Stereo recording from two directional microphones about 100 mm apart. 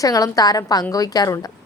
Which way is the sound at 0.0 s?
35° left (ahead or behind).